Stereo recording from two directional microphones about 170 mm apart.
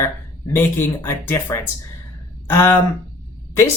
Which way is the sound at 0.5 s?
15° left (ahead or behind).